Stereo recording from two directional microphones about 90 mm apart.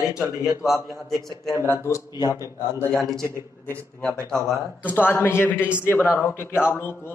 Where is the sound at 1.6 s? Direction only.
30° left (ahead or behind).